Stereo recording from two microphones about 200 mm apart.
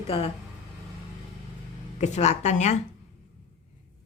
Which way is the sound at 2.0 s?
35° left (ahead or behind).